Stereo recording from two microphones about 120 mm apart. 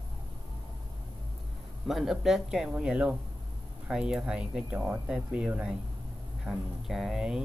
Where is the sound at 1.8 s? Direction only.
Centre (ahead or behind).